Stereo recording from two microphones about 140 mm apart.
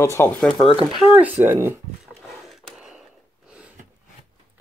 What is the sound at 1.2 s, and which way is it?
Speech, 15° right (ahead or behind).